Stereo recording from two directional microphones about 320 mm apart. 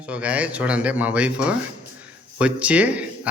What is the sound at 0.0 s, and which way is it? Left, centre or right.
Speech, centre.